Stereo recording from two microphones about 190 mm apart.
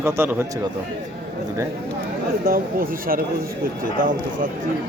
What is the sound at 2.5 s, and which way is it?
Speech, 50° right (ahead or behind).